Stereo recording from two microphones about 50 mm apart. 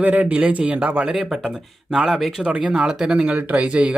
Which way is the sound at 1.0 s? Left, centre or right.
Centre.